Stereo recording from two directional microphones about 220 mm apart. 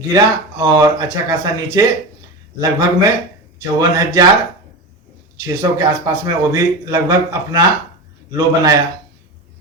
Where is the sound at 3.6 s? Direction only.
15° right (ahead or behind).